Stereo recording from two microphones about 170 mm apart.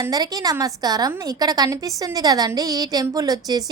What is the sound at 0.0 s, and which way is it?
Speech, 20° right (ahead or behind).